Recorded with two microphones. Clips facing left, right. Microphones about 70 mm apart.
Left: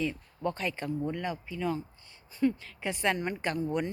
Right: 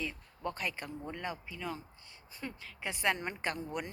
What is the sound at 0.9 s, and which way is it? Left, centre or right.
Speech, right.